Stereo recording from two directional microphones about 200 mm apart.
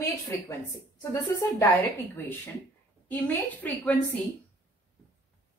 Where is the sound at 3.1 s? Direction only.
10° left (ahead or behind).